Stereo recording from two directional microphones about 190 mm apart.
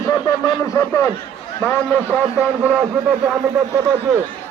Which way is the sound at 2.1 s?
5° right (ahead or behind).